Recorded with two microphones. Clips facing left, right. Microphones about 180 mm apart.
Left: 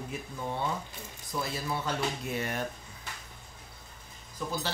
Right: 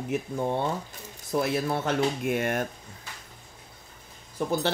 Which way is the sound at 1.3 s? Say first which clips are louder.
Right 8 dB; 60° right (ahead or behind).